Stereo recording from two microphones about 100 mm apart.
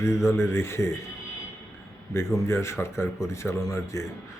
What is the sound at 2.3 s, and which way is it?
Speech, 30° left (ahead or behind).